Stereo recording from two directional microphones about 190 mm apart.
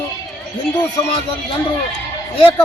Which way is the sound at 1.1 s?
30° left (ahead or behind).